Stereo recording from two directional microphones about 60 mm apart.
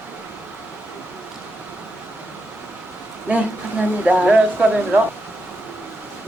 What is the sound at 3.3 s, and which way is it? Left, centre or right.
Speech, right.